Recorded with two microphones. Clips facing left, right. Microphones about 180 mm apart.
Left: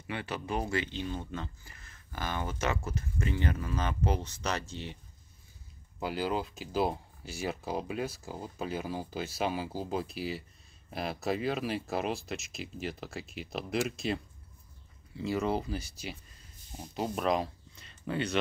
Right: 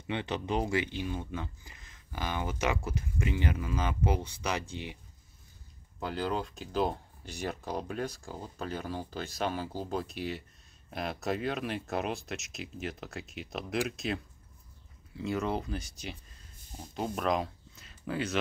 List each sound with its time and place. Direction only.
0.0 s speech: 20° right (ahead or behind)
5.9 s speech: 10° left (ahead or behind)